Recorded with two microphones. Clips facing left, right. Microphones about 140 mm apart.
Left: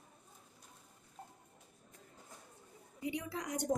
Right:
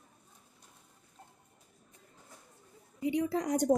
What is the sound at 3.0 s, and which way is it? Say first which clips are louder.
Speech: right 9 dB; 30° right (ahead or behind).